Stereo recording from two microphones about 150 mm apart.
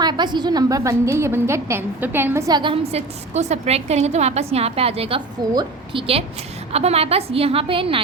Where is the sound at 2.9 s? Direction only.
45° right (ahead or behind).